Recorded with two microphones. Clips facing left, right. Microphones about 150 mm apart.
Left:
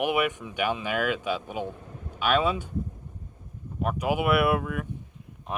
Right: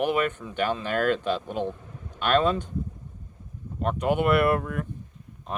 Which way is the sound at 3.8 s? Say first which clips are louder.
Right 2 dB; 5° left (ahead or behind).